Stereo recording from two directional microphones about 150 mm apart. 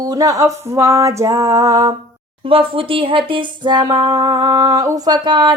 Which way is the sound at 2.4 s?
35° right (ahead or behind).